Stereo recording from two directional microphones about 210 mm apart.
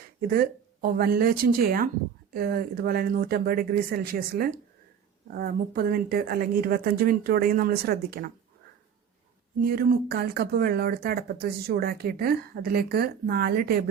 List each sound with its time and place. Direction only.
0.2 s speech: 45° right (ahead or behind)
9.6 s speech: 45° right (ahead or behind)